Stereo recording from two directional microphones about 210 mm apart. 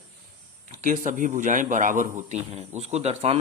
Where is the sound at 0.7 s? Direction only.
40° right (ahead or behind).